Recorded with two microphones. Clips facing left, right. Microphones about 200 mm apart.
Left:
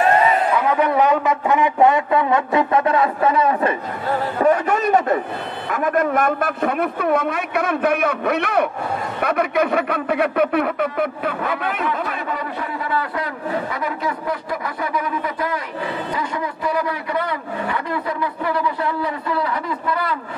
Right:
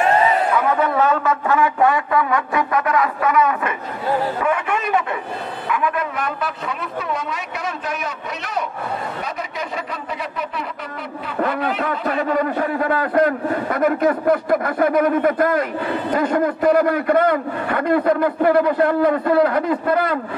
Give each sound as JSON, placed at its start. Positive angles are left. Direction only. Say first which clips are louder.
{"t": 0.7, "sound": "a sound", "louder": "left 1 dB", "side_deg": 15}
{"t": 4.4, "sound": "a man's voice", "louder": "left 4 dB", "side_deg": 40}
{"t": 11.8, "sound": "a man's voice", "louder": "right 3 dB", "side_deg": -45}